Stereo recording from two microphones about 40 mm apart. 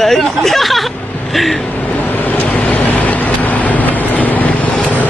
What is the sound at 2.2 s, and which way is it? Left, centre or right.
Vehicle, left.